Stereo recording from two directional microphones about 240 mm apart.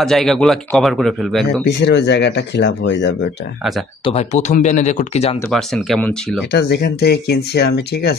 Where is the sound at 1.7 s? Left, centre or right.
Left.